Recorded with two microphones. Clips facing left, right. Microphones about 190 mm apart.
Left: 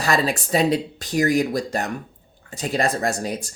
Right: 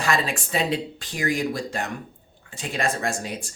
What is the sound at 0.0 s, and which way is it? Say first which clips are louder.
Speech: left 3 dB; 35° left (ahead or behind).